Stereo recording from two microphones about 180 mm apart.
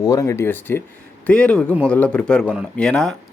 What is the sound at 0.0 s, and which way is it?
Speech, 20° left (ahead or behind).